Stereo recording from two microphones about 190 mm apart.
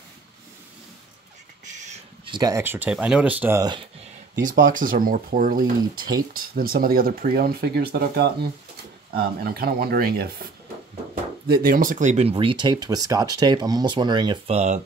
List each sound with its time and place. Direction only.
1.7 s a sound: 40° right (ahead or behind)
2.2 s speech: 20° right (ahead or behind)
4.4 s speech: 45° right (ahead or behind)